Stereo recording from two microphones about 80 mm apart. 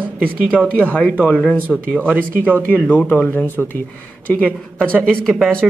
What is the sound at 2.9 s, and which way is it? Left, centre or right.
Speech, left.